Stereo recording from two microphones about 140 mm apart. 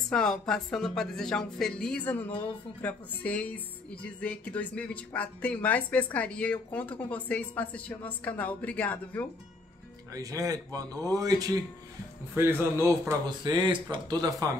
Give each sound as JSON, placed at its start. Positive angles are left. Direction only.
{"t": 0.1, "sound": "speech", "side_deg": 5}
{"t": 10.1, "sound": "a man's voice", "side_deg": -25}
{"t": 13.4, "sound": "speech", "side_deg": -30}